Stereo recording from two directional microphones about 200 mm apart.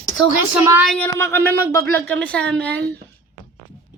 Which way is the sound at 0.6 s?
15° right (ahead or behind).